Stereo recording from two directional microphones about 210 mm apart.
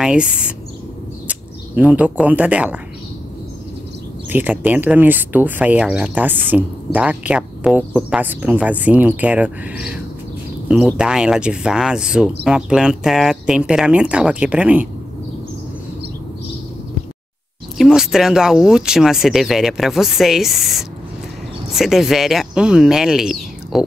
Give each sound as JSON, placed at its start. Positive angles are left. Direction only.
{"t": 0.0, "sound": "speech", "side_deg": -5}
{"t": 4.3, "sound": "speech", "side_deg": -10}
{"t": 17.7, "sound": "speech", "side_deg": 0}